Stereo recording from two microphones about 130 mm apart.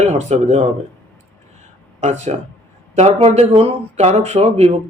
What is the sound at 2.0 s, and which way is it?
Speech, 60° right (ahead or behind).